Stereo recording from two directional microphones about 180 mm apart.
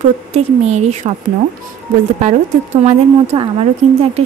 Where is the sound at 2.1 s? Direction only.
35° right (ahead or behind).